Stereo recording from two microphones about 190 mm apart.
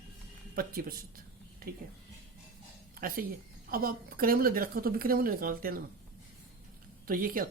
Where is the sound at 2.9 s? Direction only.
50° right (ahead or behind).